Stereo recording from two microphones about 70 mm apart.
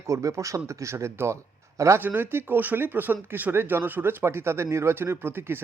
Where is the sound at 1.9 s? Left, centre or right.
Right.